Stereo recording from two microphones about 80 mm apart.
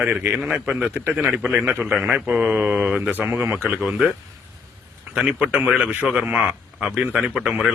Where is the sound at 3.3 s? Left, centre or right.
Right.